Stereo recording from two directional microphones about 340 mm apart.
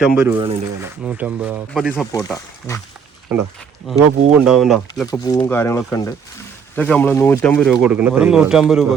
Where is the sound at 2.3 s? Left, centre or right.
Centre.